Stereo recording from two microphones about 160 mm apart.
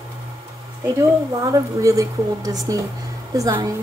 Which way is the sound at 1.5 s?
20° right (ahead or behind).